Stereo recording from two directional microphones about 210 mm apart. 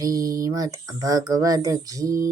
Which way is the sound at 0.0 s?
15° right (ahead or behind).